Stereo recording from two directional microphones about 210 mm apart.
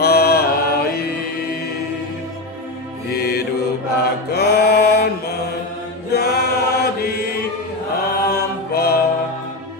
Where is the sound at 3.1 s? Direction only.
50° left (ahead or behind).